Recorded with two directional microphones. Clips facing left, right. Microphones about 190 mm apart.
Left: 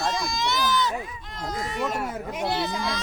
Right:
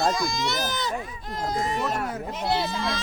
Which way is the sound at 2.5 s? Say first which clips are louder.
Right 1 dB; 25° right (ahead or behind).